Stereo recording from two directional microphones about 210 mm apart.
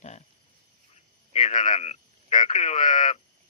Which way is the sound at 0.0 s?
30° left (ahead or behind).